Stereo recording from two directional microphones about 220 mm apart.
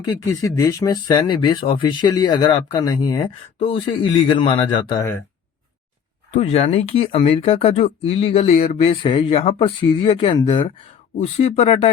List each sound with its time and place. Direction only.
0.0 s speech: 15° left (ahead or behind)
6.3 s speech: 30° left (ahead or behind)